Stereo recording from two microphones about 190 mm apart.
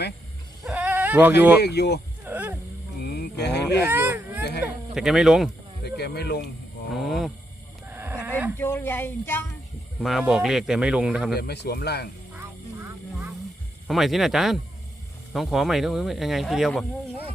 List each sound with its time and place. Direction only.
0.6 s dog: 5° right (ahead or behind)
1.6 s speech: 60° left (ahead or behind)
2.2 s a sound: 10° right (ahead or behind)
3.0 s a sound: 60° left (ahead or behind)
3.8 s speech: 10° right (ahead or behind)
5.8 s speech: 60° left (ahead or behind)
6.9 s speech: centre (ahead or behind)
7.9 s wild animals: 10° right (ahead or behind)
8.5 s speech: 10° left (ahead or behind)
10.0 s speech: centre (ahead or behind)
11.3 s speech: 60° left (ahead or behind)
13.8 s speech: centre (ahead or behind)